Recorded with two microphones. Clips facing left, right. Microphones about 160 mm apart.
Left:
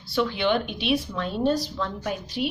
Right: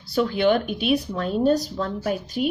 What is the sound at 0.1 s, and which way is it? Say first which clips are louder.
A woman's voice: right 4 dB; 45° right (ahead or behind).